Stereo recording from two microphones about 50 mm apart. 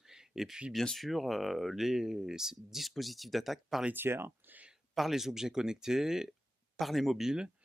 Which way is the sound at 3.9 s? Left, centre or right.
Right.